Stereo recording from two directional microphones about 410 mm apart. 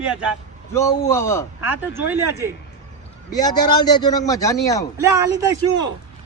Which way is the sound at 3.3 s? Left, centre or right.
Centre.